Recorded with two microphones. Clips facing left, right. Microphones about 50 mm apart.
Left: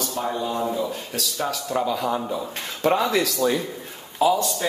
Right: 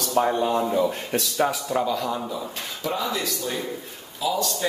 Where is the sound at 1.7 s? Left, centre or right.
Centre.